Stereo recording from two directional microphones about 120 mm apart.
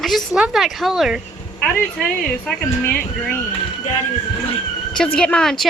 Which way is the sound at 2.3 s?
5° left (ahead or behind).